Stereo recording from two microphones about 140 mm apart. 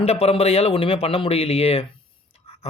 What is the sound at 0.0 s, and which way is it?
Speech, 45° left (ahead or behind).